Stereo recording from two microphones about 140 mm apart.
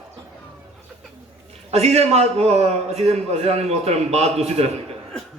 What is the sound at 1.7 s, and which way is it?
A man's voice, 50° right (ahead or behind).